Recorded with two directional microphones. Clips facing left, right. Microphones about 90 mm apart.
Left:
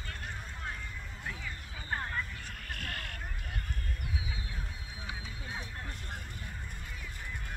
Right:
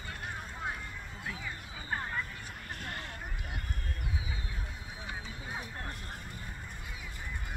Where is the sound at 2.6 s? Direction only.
25° right (ahead or behind).